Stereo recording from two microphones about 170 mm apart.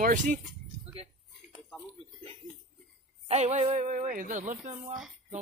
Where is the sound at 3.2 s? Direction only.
40° right (ahead or behind).